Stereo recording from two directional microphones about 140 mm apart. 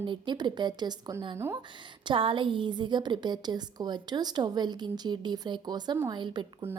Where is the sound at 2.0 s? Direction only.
40° right (ahead or behind).